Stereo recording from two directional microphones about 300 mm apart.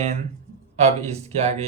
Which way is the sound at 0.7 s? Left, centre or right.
Right.